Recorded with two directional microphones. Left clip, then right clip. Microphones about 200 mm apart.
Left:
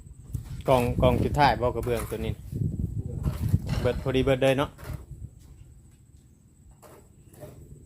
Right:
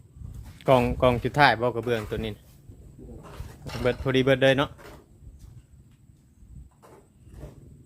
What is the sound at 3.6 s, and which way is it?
Speech, 15° right (ahead or behind).